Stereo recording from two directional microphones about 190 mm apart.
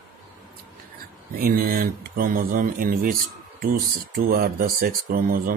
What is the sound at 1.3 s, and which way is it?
Speech, 50° right (ahead or behind).